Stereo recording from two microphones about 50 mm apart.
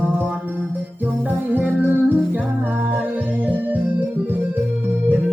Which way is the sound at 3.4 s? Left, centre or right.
Right.